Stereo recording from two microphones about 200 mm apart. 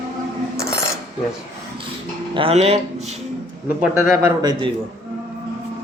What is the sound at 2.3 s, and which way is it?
Speech, 30° right (ahead or behind).